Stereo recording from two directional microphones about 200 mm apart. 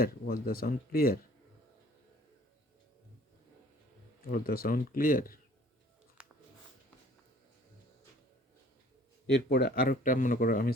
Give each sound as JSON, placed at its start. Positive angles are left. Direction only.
{"t": 0.0, "sound": "speech", "side_deg": 50}
{"t": 4.3, "sound": "speech", "side_deg": 45}
{"t": 6.2, "sound": "a sound", "side_deg": -5}
{"t": 9.3, "sound": "speech", "side_deg": 55}